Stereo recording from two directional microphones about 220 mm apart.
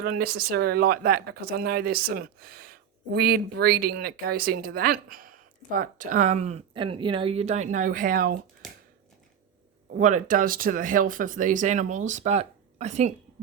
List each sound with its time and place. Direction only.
0.0 s speech: 45° right (ahead or behind)
8.6 s a sound: centre (ahead or behind)
10.0 s speech: 35° right (ahead or behind)